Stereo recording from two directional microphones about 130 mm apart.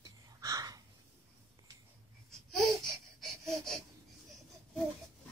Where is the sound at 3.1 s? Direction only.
Centre (ahead or behind).